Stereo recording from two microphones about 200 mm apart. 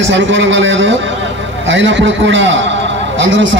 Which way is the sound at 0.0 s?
65° right (ahead or behind).